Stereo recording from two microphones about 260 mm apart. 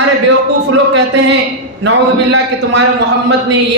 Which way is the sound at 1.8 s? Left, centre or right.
Right.